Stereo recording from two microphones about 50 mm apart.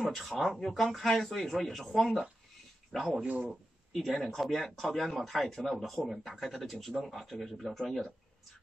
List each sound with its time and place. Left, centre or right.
0.1 s a man's voice: centre
2.9 s speech: centre
3.3 s a man's voice: right
4.0 s a man's voice: centre